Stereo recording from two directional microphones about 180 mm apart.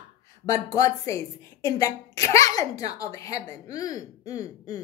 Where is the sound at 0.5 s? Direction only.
20° left (ahead or behind).